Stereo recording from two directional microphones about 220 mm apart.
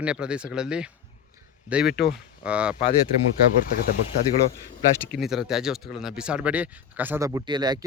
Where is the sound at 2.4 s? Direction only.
5° right (ahead or behind).